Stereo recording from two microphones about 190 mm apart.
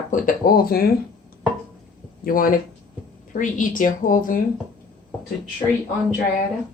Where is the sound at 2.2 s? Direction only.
50° left (ahead or behind).